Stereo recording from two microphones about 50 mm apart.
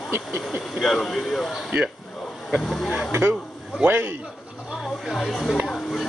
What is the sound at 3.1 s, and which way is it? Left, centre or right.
Speech, right.